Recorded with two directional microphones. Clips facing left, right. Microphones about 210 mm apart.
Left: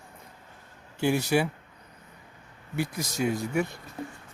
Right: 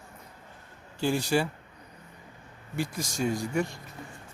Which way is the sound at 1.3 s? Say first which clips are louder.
Left 1 dB; 10° left (ahead or behind).